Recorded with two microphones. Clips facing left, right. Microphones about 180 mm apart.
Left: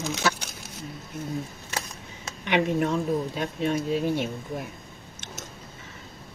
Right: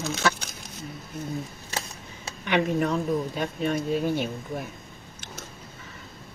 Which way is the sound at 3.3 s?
25° left (ahead or behind).